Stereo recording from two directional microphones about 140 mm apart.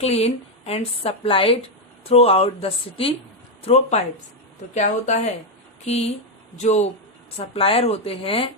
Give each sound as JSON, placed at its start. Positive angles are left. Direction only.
{"t": 0.0, "sound": "a woman's voice", "side_deg": 50}
{"t": 7.3, "sound": "a woman's voice", "side_deg": 40}